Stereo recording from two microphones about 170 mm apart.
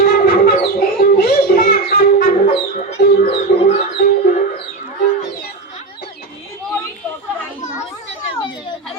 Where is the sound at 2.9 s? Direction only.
75° left (ahead or behind).